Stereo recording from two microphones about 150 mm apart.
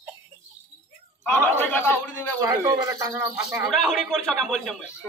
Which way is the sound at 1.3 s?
10° left (ahead or behind).